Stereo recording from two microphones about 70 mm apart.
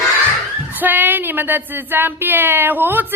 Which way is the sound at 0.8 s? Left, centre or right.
Right.